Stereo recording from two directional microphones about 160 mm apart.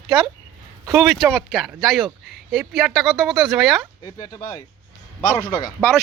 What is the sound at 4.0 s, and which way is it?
Speech, 20° left (ahead or behind).